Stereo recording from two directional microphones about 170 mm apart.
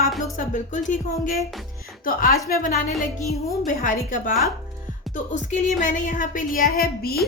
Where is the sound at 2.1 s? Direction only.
55° left (ahead or behind).